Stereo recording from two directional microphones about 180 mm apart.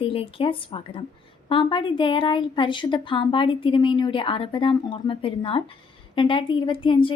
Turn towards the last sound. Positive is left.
turn(degrees=25)  # may be behind; listen again after turning